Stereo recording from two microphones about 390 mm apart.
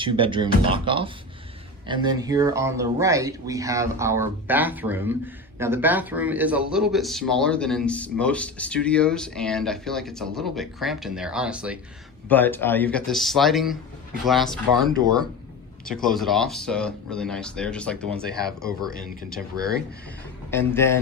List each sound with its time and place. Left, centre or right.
0.0 s speech: centre
15.9 s speech: centre
18.9 s speech: left
20.5 s speech: centre